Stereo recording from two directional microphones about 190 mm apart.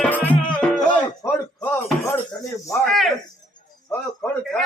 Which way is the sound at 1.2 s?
10° left (ahead or behind).